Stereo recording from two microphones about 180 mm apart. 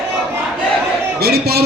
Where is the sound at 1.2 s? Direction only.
60° right (ahead or behind).